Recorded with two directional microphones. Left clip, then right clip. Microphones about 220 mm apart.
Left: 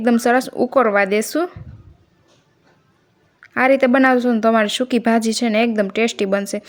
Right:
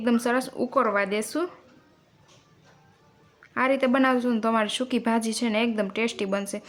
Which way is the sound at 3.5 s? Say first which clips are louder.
Left 9 dB; 25° left (ahead or behind).